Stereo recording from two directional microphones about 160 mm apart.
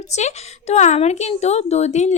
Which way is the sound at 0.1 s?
45° left (ahead or behind).